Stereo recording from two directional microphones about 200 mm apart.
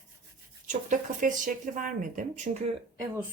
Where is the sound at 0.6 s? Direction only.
40° right (ahead or behind).